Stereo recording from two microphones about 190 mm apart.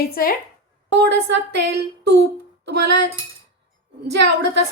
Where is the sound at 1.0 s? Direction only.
65° right (ahead or behind).